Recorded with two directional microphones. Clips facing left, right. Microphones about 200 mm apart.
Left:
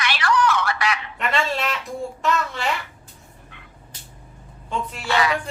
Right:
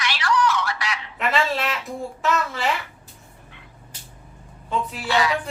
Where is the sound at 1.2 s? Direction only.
Centre (ahead or behind).